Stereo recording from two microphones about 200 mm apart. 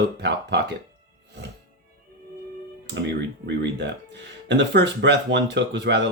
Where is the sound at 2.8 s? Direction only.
60° right (ahead or behind).